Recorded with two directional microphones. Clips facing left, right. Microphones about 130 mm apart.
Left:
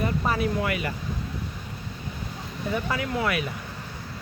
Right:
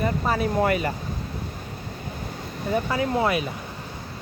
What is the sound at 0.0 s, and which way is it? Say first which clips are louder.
Speech: right 2 dB; 40° right (ahead or behind).